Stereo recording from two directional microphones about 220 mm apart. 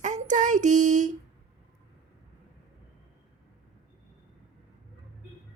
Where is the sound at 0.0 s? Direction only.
35° right (ahead or behind).